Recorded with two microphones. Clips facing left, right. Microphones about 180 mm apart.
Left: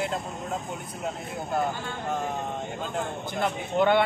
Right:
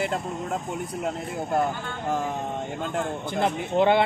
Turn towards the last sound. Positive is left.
turn(degrees=-25)  # may be behind; listen again after turning